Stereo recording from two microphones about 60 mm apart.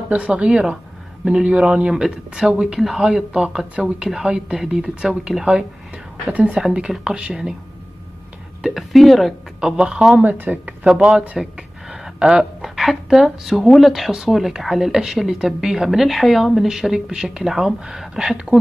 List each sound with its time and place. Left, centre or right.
0.1 s speech: centre
8.6 s speech: centre
10.3 s speech: right
10.9 s speech: centre
11.9 s a sound: centre
12.7 s speech: centre